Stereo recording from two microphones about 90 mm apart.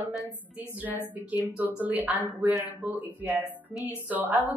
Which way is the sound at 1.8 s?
20° right (ahead or behind).